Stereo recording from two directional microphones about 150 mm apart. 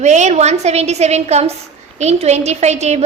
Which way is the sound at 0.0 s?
50° right (ahead or behind).